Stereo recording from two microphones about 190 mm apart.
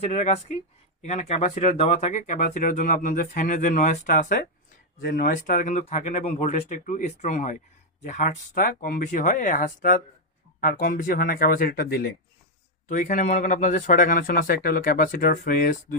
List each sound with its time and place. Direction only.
0.0 s speech: 35° left (ahead or behind); by 12.1 s 55° left (ahead or behind)
12.9 s speech: 40° left (ahead or behind)